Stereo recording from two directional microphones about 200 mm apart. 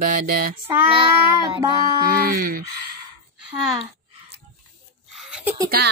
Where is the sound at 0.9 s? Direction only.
25° right (ahead or behind).